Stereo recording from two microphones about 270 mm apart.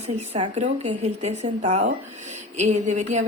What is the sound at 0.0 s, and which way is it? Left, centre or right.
A woman's voice, right.